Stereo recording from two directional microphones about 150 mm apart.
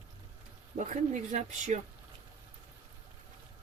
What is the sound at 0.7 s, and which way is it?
Speech, 50° right (ahead or behind).